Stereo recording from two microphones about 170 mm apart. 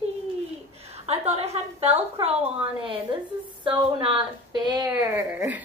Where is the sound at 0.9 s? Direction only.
40° right (ahead or behind).